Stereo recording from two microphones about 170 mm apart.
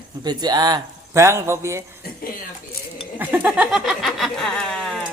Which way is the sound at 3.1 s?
10° right (ahead or behind).